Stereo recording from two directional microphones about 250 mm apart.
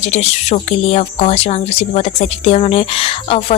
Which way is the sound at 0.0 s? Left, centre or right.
Left.